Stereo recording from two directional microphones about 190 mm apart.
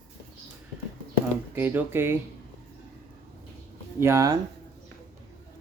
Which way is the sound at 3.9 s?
15° right (ahead or behind).